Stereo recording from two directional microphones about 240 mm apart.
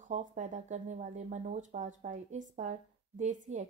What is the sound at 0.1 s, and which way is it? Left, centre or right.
A woman's voice, right.